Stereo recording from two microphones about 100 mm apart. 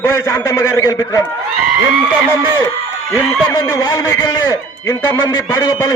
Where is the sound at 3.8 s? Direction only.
40° left (ahead or behind).